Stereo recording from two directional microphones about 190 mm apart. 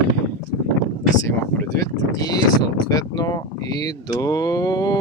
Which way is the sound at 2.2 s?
20° left (ahead or behind).